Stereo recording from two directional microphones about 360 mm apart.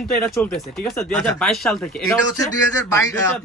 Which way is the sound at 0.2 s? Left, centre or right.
Centre.